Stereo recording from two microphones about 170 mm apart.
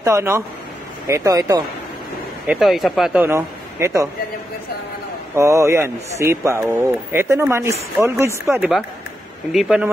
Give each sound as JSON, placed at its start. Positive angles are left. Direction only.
{"t": 0.0, "sound": "a man's voice", "side_deg": -15}
{"t": 2.4, "sound": "a man's voice", "side_deg": -5}
{"t": 5.3, "sound": "a man's voice", "side_deg": -15}
{"t": 8.5, "sound": "speech", "side_deg": -5}